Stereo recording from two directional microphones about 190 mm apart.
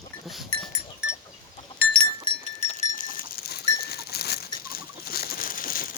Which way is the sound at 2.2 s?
35° left (ahead or behind).